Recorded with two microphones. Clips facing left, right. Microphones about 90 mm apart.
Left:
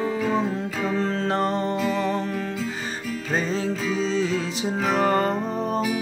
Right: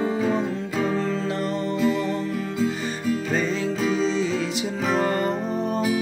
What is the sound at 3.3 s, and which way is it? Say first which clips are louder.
Music: right 1 dB; 35° left (ahead or behind).